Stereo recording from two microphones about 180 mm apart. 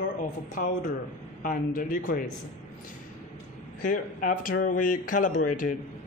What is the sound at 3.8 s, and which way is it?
Speech, 50° left (ahead or behind).